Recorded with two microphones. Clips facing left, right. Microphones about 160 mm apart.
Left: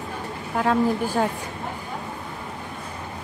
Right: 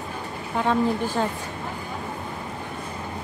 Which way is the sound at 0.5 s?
5° left (ahead or behind).